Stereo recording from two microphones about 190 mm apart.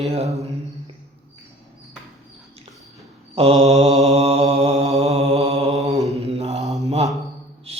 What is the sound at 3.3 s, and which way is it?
Mantra, 35° right (ahead or behind).